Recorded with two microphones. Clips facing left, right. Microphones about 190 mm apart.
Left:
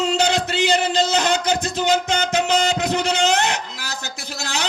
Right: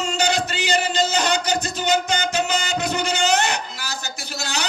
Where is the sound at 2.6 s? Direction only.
90° left.